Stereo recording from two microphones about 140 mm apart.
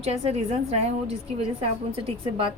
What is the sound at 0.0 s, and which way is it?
A woman's voice, 45° right (ahead or behind).